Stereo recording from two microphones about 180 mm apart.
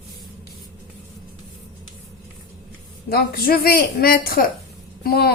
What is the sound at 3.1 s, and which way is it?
A woman's voice, 60° left (ahead or behind).